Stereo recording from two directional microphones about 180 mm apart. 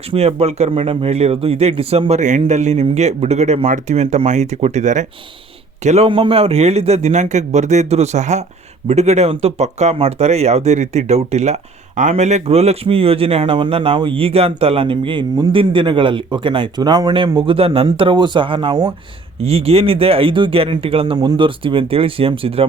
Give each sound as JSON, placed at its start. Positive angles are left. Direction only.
{"t": 0.1, "sound": "speech", "side_deg": -35}